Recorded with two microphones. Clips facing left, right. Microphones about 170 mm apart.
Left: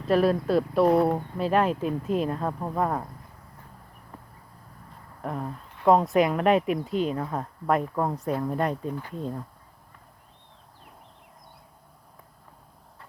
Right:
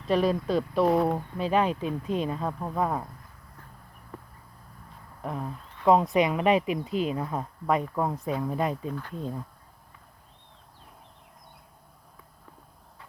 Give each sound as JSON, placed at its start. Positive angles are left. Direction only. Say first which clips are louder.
{"t": 0.1, "sound": "speech", "louder": "left 3 dB", "side_deg": 5}
{"t": 5.2, "sound": "speech", "louder": "left 2 dB", "side_deg": 0}
{"t": 8.9, "sound": "speech", "louder": "left 2 dB", "side_deg": 10}
{"t": 9.1, "sound": "speech", "louder": "left 2 dB", "side_deg": 0}